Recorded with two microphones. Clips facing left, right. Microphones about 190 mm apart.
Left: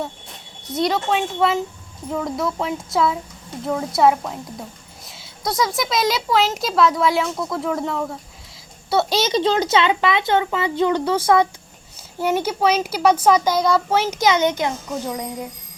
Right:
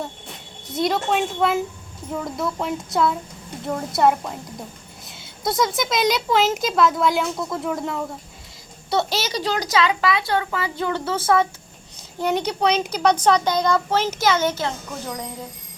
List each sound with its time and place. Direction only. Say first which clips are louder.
0.7 s a child's voice: left 1 dB; centre (ahead or behind)
9.1 s a child's voice: left 6 dB; 20° left (ahead or behind)